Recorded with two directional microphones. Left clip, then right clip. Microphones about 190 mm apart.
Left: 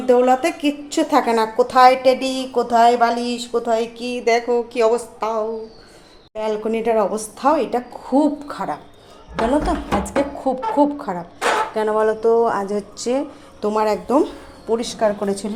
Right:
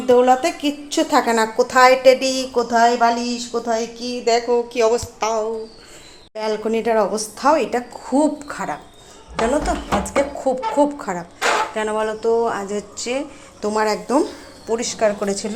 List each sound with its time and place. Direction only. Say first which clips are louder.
0.0 s a woman's voice: right 1 dB; 5° left (ahead or behind)
11.7 s speech: left 3 dB; 20° left (ahead or behind)
13.7 s a woman's voice: left 1 dB; 10° left (ahead or behind)